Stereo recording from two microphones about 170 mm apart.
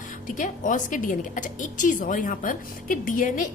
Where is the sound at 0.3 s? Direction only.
50° left (ahead or behind).